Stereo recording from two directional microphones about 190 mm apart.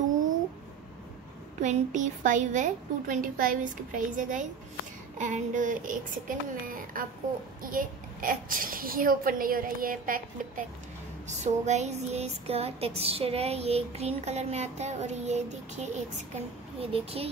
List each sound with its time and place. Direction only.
1.6 s music: 40° right (ahead or behind)
5.1 s a child's voice: 40° right (ahead or behind)
11.2 s music: 35° right (ahead or behind)